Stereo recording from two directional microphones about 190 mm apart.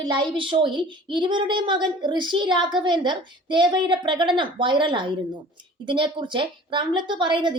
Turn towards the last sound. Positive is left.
turn(degrees=-25)  # may be behind; listen again after turning